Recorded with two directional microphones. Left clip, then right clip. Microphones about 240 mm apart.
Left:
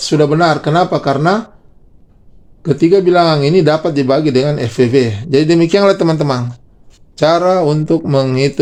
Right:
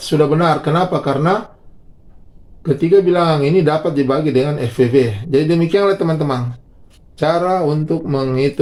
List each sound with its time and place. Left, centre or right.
0.0 s speech: left
2.6 s speech: left